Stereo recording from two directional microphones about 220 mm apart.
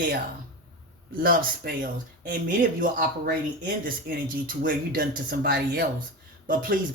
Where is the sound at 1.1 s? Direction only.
40° right (ahead or behind).